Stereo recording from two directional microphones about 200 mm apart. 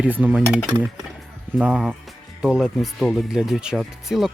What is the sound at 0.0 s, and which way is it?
Cutlery, 10° right (ahead or behind).